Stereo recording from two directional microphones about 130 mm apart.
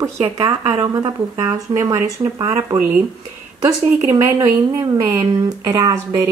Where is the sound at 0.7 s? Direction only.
30° right (ahead or behind).